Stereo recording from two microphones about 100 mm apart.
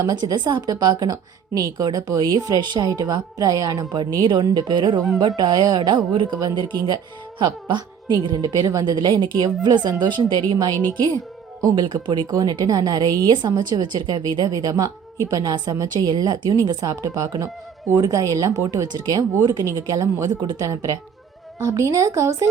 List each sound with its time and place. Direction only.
0.0 s a woman's voice: 40° right (ahead or behind)
4.0 s speech: 50° right (ahead or behind)
10.8 s speech: 15° left (ahead or behind)
11.7 s a woman's voice: 50° right (ahead or behind); by 22.4 s 30° right (ahead or behind)